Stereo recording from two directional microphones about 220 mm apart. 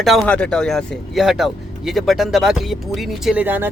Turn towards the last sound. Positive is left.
turn(degrees=-10)  # may be behind; listen again after turning